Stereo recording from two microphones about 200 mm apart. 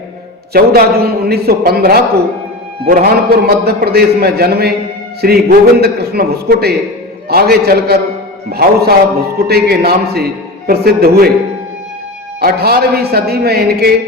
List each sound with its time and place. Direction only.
0.5 s a man's voice: 50° right (ahead or behind)
12.4 s a man's voice: 50° right (ahead or behind)